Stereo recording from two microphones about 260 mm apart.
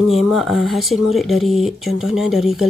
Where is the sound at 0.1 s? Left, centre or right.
Centre.